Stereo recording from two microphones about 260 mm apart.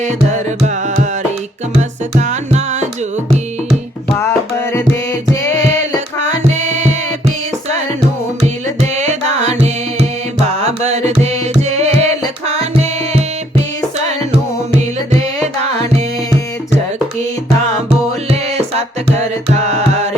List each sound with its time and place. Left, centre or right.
0.0 s music: right
2.1 s music: right
4.1 s music: centre
6.1 s music: right
8.4 s music: right
14.7 s music: right
18.3 s music: right